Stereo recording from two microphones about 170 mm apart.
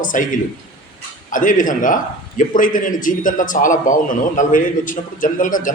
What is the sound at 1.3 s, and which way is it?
A man's voice, 50° left (ahead or behind).